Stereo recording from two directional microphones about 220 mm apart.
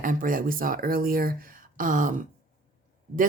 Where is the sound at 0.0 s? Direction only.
40° right (ahead or behind).